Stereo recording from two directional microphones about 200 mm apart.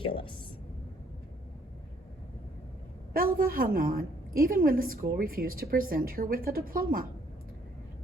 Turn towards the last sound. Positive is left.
turn(degrees=-45)  # may be behind; listen again after turning